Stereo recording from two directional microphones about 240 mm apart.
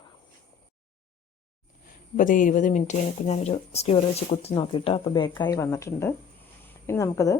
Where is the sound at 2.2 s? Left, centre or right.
Left.